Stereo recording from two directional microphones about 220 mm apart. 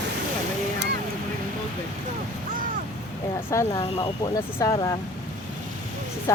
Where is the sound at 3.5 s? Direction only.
20° left (ahead or behind).